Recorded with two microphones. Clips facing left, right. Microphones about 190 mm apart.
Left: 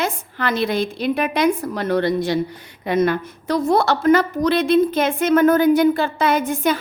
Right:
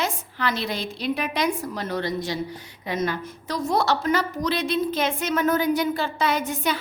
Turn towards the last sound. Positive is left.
turn(degrees=50)  # may be behind; listen again after turning